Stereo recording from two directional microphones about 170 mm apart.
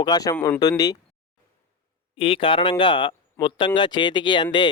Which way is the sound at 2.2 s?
30° left (ahead or behind).